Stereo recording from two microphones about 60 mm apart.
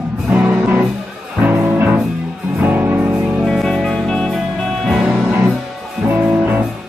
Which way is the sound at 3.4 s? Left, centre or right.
Centre.